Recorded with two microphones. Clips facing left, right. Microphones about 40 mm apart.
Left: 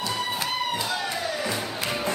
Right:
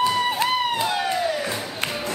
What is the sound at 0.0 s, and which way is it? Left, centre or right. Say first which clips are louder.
Music: right 7 dB; right.